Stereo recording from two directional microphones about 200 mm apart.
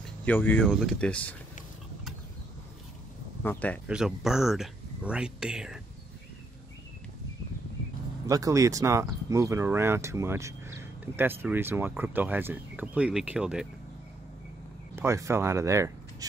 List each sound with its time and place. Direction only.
0.0 s speech: 5° left (ahead or behind)
3.4 s speech: 5° left (ahead or behind)
3.8 s speech: 5° right (ahead or behind)
8.3 s speech: 15° right (ahead or behind)
15.0 s speech: 15° right (ahead or behind)